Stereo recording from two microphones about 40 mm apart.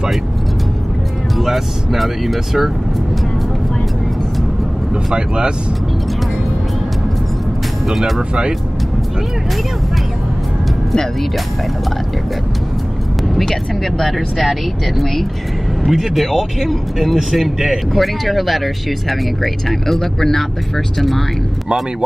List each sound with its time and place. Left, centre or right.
1.4 s speech: centre
5.1 s speech: right
13.3 s speech: centre